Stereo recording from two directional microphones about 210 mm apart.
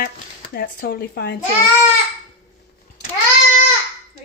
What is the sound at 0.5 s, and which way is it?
Speech, 50° left (ahead or behind).